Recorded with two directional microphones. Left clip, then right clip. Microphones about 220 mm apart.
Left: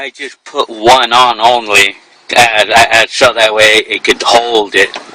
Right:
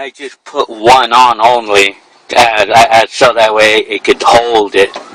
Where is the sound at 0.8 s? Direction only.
25° left (ahead or behind).